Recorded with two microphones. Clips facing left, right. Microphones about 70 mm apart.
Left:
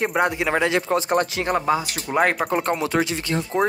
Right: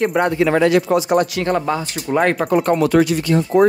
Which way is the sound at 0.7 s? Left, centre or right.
Left.